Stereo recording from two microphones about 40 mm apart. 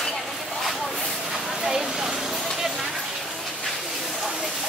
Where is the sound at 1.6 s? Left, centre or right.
Centre.